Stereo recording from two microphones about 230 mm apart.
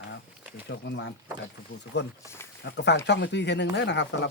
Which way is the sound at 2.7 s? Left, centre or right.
Left.